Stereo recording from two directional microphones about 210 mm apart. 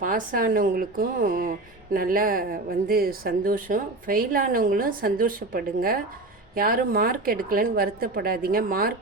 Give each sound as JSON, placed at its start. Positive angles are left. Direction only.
{"t": 0.0, "sound": "a woman's voice", "side_deg": -40}